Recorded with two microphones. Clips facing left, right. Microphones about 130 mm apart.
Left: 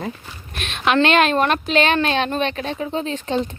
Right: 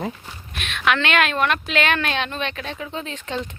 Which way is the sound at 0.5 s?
35° left (ahead or behind).